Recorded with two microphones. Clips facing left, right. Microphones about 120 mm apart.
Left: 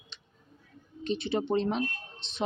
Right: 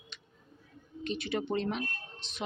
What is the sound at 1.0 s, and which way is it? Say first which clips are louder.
Speech: left 4 dB; 30° left (ahead or behind).